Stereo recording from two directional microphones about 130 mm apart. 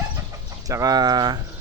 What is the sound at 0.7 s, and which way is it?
Speech, 25° right (ahead or behind).